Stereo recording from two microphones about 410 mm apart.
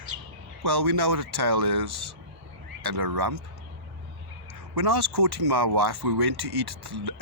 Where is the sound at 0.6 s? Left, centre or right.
Right.